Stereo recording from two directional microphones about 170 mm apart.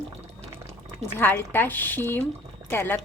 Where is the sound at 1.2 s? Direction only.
15° left (ahead or behind).